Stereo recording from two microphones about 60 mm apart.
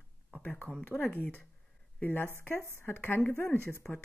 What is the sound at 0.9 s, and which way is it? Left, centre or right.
Speech, left.